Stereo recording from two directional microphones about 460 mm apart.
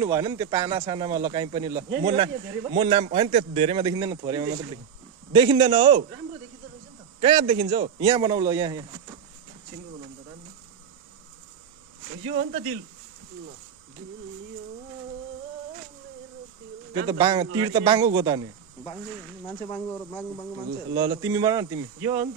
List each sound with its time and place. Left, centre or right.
0.0 s speech: centre
7.2 s speech: centre
12.3 s speech: centre
17.1 s speech: centre
19.4 s speech: centre
20.9 s speech: centre